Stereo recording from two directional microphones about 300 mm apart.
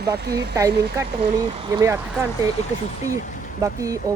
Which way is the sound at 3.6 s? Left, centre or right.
Centre.